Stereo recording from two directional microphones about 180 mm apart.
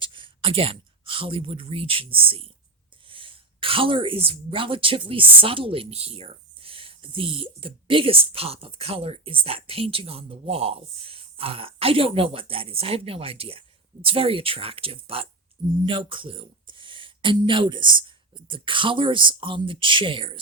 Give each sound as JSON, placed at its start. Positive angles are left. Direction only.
{"t": 0.0, "sound": "speech", "side_deg": -30}